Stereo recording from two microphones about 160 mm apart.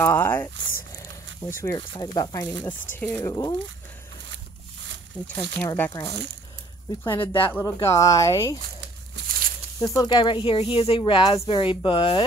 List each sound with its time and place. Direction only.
0.0 s a sound: 15° left (ahead or behind)
1.6 s speech: 25° left (ahead or behind)
5.2 s speech: 10° left (ahead or behind)
7.1 s speech: 30° left (ahead or behind)
7.5 s speech: 20° left (ahead or behind)
9.1 s a sound: 65° right (ahead or behind)
9.8 s speech: 20° left (ahead or behind)